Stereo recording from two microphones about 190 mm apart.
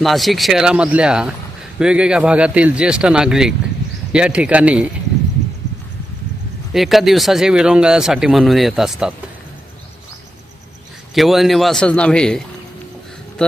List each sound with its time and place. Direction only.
0.0 s speech: centre (ahead or behind)
6.7 s speech: centre (ahead or behind)
11.1 s speech: centre (ahead or behind)